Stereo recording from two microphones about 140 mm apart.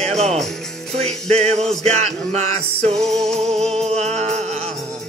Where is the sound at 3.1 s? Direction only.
5° left (ahead or behind).